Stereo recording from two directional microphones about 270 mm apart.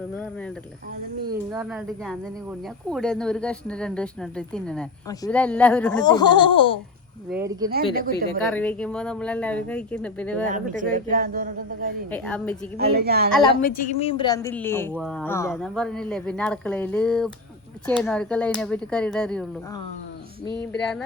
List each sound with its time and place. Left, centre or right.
1.5 s a woman's voice: centre
6.0 s a woman's voice: centre
7.3 s speech: centre
7.7 s speech: right
8.4 s a woman's voice: centre
10.4 s speech: right
12.1 s a woman's voice: centre
12.8 s speech: right
13.6 s a woman's voice: left; by 19.5 s centre
20.6 s a woman's voice: centre